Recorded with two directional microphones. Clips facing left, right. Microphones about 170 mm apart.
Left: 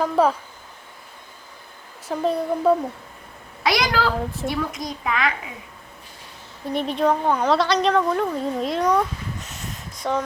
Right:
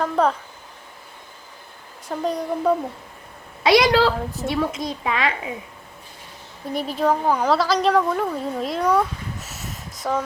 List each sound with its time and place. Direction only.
0.0 s a woman's voice: 5° left (ahead or behind)
2.0 s a woman's voice: 5° left (ahead or behind)
3.6 s a child's voice: 25° right (ahead or behind)
6.7 s a woman's voice: 5° right (ahead or behind)